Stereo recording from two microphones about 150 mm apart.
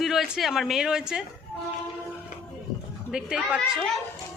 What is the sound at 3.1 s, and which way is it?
Speech, 5° right (ahead or behind).